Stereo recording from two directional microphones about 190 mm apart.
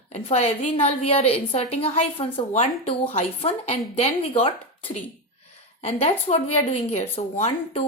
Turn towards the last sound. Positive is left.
turn(degrees=35)  # may be behind; listen again after turning